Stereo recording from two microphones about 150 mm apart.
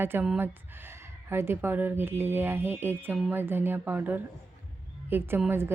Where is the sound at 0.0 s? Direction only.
15° right (ahead or behind).